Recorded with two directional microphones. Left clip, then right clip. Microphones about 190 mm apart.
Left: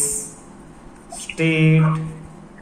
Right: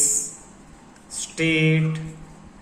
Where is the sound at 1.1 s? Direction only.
30° right (ahead or behind).